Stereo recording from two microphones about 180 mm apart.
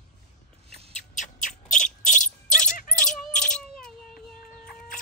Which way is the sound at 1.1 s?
45° left (ahead or behind).